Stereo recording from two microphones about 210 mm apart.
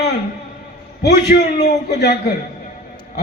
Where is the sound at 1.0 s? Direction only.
50° left (ahead or behind).